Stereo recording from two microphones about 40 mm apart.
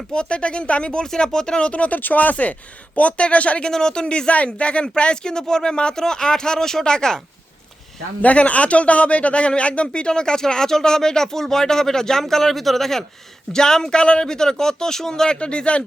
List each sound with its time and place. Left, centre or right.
0.1 s speech: left
2.0 s speech: left
3.7 s a man's voice: centre
8.2 s a man's voice: left; by 15.4 s centre
15.4 s speech: left